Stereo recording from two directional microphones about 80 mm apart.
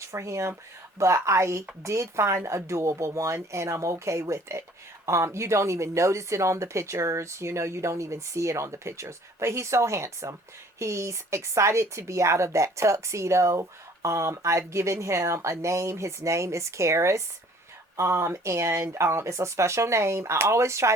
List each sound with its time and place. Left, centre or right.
0.0 s speech: right